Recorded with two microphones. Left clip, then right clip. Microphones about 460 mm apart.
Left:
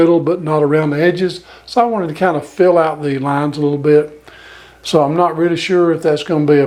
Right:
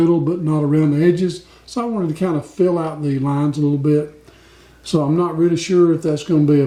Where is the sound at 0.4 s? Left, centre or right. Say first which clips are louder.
Left 5 dB; left.